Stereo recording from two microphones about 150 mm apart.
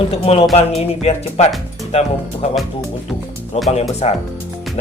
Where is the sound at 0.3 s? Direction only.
45° left (ahead or behind).